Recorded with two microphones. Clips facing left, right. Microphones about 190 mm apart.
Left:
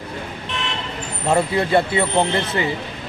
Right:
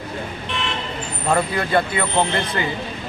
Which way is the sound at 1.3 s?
25° left (ahead or behind).